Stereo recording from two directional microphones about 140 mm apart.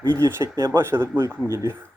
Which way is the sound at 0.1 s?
15° right (ahead or behind).